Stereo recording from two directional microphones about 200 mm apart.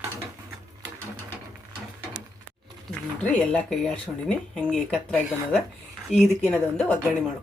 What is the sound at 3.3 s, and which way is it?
Speech, 5° left (ahead or behind).